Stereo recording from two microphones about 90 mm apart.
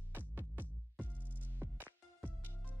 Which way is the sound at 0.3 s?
20° right (ahead or behind).